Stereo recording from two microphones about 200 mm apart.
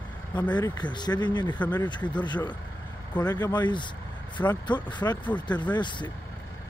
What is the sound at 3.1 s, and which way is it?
Speech, 20° left (ahead or behind).